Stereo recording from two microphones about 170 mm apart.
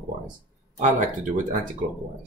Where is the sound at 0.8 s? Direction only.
50° right (ahead or behind).